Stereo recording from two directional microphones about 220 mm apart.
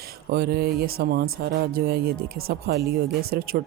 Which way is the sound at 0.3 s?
45° right (ahead or behind).